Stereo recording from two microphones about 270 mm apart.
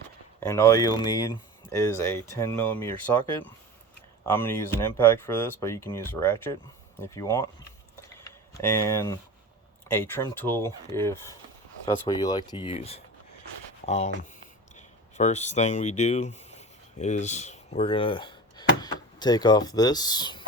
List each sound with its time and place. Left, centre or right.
0.3 s speech: centre
8.2 s a sound: centre
9.9 s speech: centre